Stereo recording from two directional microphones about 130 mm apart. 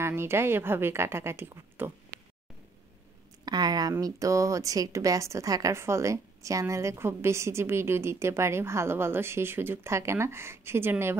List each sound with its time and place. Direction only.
0.0 s a woman's voice: 20° right (ahead or behind)
3.4 s a woman's voice: 30° right (ahead or behind)